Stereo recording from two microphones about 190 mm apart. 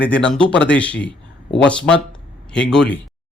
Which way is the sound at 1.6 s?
5° left (ahead or behind).